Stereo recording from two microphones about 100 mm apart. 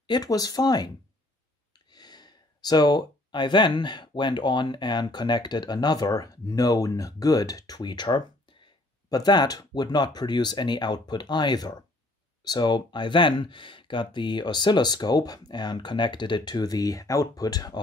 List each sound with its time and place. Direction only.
0.0 s speech: 45° left (ahead or behind)
9.1 s speech: 45° left (ahead or behind)